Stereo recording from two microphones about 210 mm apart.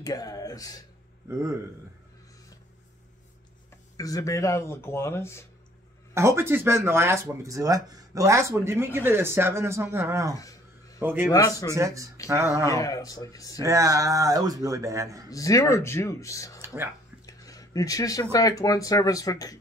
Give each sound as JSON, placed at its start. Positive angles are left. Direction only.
{"t": 0.0, "sound": "speech", "side_deg": 15}
{"t": 3.9, "sound": "speech", "side_deg": 15}
{"t": 6.1, "sound": "speech", "side_deg": -10}
{"t": 11.3, "sound": "speech", "side_deg": 15}
{"t": 11.7, "sound": "speech", "side_deg": -15}
{"t": 12.6, "sound": "speech", "side_deg": 15}
{"t": 13.6, "sound": "speech", "side_deg": -15}
{"t": 15.2, "sound": "speech", "side_deg": 15}
{"t": 16.6, "sound": "a sound", "side_deg": -10}
{"t": 17.3, "sound": "a sound", "side_deg": 15}
{"t": 18.3, "sound": "speech", "side_deg": 15}